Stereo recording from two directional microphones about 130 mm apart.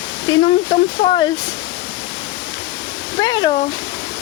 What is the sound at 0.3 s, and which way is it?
Speech, 40° left (ahead or behind).